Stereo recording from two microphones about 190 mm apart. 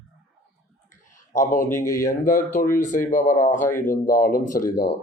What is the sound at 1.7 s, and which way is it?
Speech, 15° left (ahead or behind).